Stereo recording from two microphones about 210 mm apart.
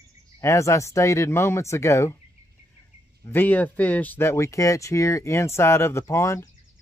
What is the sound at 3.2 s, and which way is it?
Speech, 10° left (ahead or behind).